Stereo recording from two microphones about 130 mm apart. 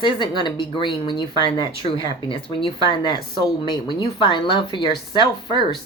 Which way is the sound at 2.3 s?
35° left (ahead or behind).